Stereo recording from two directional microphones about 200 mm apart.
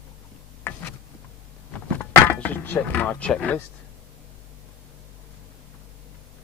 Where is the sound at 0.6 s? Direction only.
10° left (ahead or behind).